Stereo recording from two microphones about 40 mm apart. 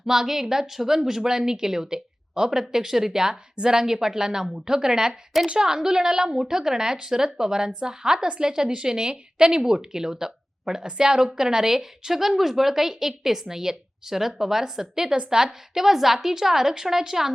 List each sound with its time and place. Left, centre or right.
0.1 s a woman's voice: centre